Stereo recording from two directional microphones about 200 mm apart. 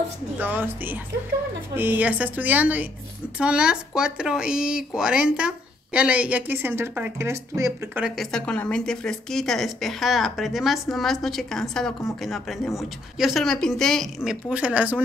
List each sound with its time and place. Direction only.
0.4 s a woman's voice: 10° right (ahead or behind)